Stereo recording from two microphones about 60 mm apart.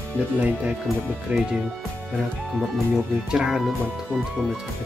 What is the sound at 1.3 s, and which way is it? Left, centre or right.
Speech, centre.